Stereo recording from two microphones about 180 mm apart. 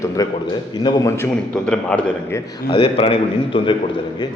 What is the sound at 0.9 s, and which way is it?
Speech, 15° left (ahead or behind).